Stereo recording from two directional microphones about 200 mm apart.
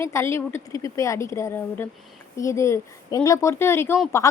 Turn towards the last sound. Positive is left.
turn(degrees=15)  # may be behind; listen again after turning